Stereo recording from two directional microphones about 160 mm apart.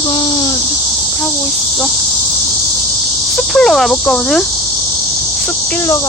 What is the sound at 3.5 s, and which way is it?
Cricket, 5° left (ahead or behind).